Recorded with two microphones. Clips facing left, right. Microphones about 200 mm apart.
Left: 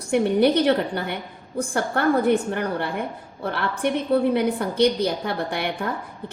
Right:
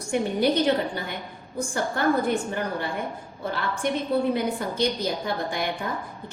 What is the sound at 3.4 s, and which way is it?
A woman's voice, 65° left (ahead or behind).